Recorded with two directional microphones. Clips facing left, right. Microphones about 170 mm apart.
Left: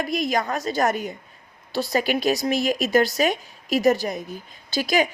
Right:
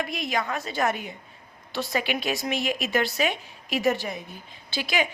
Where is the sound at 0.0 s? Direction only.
40° left (ahead or behind).